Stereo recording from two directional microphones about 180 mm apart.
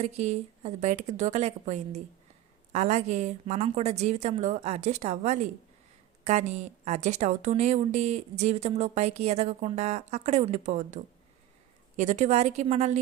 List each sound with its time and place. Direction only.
0.0 s a woman's voice: 40° right (ahead or behind)